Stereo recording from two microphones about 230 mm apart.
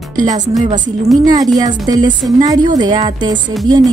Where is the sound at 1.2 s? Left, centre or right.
Centre.